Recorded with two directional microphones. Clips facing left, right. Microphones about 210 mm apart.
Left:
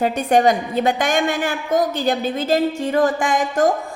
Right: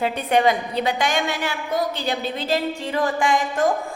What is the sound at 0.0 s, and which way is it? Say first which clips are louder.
A woman's voice: left 3 dB; 45° left (ahead or behind).